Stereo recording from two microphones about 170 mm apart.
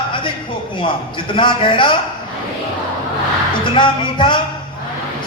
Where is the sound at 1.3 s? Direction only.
30° left (ahead or behind).